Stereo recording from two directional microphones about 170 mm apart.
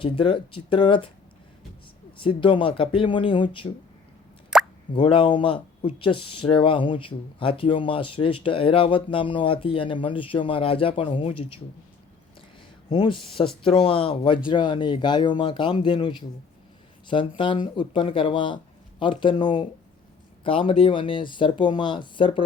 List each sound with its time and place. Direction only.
0.0 s speech: 30° left (ahead or behind)
2.1 s speech: 30° left (ahead or behind)
4.5 s plop: 5° right (ahead or behind)
4.9 s speech: 30° left (ahead or behind)
12.9 s speech: 30° left (ahead or behind)